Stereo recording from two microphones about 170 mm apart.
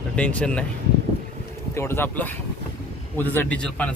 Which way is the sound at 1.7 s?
15° left (ahead or behind).